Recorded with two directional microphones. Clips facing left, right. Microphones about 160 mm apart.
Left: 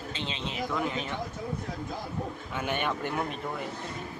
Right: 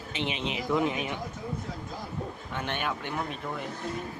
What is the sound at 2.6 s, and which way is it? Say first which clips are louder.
Speech: left 2 dB; 5° left (ahead or behind).